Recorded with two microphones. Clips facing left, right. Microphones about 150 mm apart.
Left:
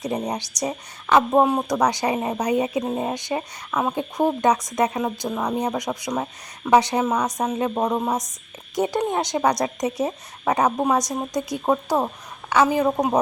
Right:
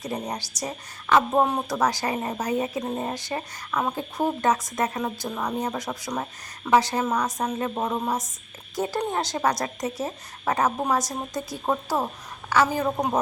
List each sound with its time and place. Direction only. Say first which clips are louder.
0.0 s a woman's voice: left 5 dB; 20° left (ahead or behind)